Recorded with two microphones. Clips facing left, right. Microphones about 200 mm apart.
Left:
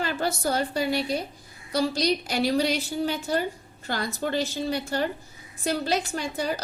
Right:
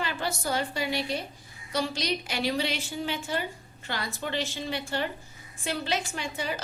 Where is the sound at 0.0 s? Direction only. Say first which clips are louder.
Left 5 dB; 45° left (ahead or behind).